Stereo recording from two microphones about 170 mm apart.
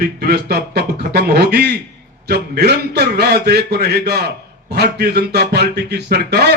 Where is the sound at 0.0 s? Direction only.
65° right (ahead or behind).